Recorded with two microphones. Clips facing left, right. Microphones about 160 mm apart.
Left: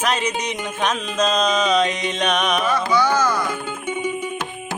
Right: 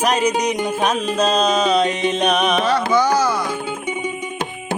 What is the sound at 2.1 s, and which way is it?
Music, 10° right (ahead or behind).